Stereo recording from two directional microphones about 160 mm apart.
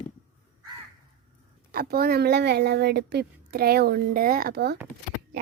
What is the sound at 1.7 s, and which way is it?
Speech, 70° right (ahead or behind).